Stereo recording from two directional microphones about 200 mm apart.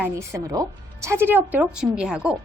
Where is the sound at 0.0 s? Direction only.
15° right (ahead or behind).